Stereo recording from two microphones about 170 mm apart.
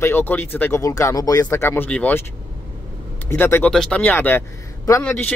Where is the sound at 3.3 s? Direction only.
15° left (ahead or behind).